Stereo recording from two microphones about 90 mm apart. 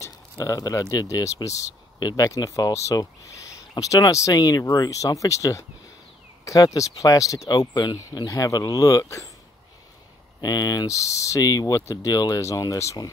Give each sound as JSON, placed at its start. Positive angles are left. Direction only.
{"t": 0.4, "sound": "speech", "side_deg": 45}
{"t": 2.0, "sound": "speech", "side_deg": 45}
{"t": 10.4, "sound": "speech", "side_deg": 45}